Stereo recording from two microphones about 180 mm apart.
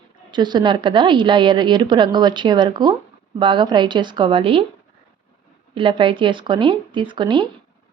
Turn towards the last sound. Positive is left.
turn(degrees=-25)  # may be behind; listen again after turning